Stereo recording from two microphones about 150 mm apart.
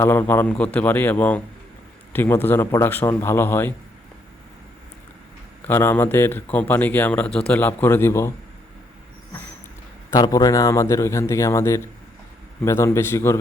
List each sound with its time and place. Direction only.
0.0 s a man's voice: 15° left (ahead or behind)
5.6 s a man's voice: 15° left (ahead or behind)
10.2 s a man's voice: 25° left (ahead or behind)